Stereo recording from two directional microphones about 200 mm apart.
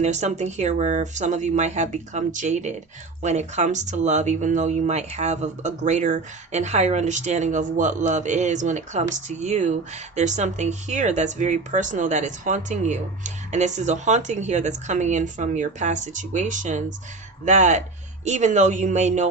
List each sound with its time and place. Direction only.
0.0 s speech: 35° right (ahead or behind)